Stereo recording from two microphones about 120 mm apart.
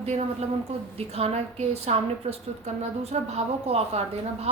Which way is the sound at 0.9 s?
60° right (ahead or behind).